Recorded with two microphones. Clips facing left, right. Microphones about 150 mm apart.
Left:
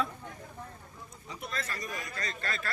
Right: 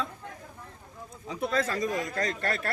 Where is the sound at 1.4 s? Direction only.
90° right; by 2.7 s 70° right (ahead or behind).